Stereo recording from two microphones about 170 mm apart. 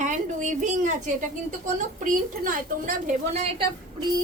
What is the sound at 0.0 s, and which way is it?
A woman's voice, 45° right (ahead or behind).